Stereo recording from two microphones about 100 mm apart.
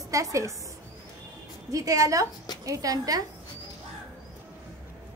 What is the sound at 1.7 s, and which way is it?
Speech, 35° right (ahead or behind).